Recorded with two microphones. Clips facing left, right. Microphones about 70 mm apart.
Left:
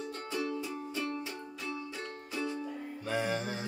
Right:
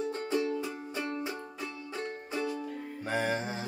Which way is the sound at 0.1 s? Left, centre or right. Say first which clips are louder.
Right 5 dB; right.